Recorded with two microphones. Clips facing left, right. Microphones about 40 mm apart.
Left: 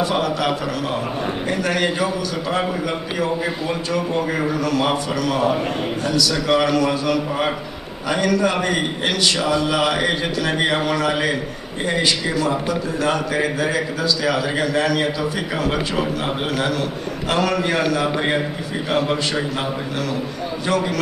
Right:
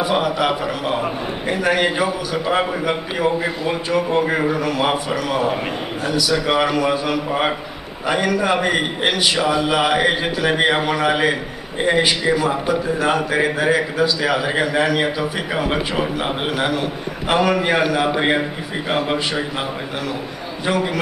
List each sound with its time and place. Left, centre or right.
0.0 s a man's voice: centre